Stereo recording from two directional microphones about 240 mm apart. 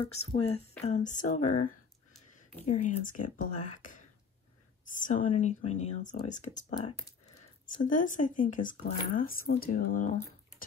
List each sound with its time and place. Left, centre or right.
0.0 s speech: left
6.5 s speech: left